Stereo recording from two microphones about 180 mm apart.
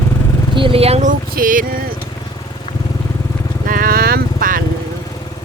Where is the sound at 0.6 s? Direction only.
30° right (ahead or behind); by 1.7 s 50° right (ahead or behind).